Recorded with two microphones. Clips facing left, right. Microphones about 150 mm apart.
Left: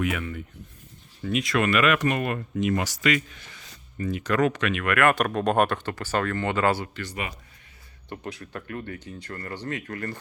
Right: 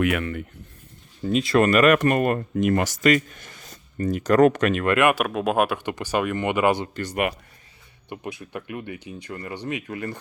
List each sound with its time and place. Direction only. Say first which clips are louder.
0.0 s speech: right 5 dB; 65° right (ahead or behind)
1.2 s speech: right 5 dB; 30° right (ahead or behind)
5.1 s speech: even; 5° right (ahead or behind); by 6.9 s 20° right (ahead or behind)
6.9 s speech: right 8 dB; 45° right (ahead or behind)
8.1 s speech: right 2 dB; 15° right (ahead or behind)